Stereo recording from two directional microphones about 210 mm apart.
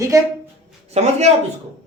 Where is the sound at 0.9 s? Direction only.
30° right (ahead or behind).